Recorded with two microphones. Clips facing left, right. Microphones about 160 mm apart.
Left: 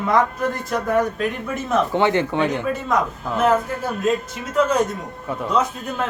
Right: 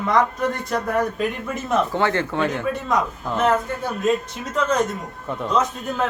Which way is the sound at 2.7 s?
Centre (ahead or behind).